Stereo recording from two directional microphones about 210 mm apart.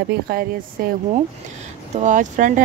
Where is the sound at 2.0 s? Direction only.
35° right (ahead or behind).